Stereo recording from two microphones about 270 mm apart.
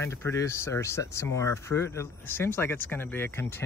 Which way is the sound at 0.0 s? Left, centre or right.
Centre.